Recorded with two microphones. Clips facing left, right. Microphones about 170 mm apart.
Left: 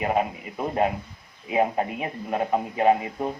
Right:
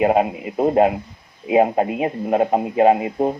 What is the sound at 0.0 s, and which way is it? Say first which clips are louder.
A man's voice: right 8 dB; 40° right (ahead or behind).